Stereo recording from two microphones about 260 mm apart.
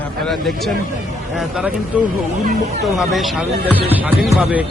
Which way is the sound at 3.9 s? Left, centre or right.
Centre.